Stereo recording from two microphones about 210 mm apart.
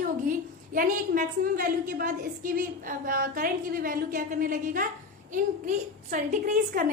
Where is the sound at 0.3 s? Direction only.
40° right (ahead or behind).